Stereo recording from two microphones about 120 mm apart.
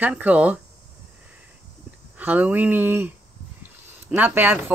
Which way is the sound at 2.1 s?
15° right (ahead or behind).